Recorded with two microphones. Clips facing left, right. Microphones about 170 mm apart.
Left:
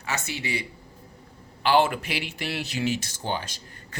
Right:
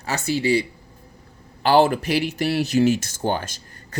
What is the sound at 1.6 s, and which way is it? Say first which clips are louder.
Speech: right 5 dB; 40° right (ahead or behind).